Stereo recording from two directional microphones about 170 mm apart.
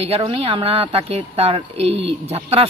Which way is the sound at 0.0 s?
35° right (ahead or behind).